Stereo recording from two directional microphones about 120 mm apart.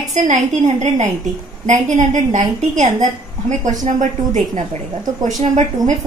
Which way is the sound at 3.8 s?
90° right.